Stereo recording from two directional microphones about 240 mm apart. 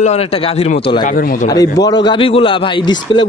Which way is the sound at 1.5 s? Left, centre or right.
Centre.